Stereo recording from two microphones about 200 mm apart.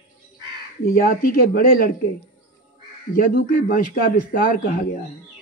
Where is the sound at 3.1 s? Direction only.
45° left (ahead or behind).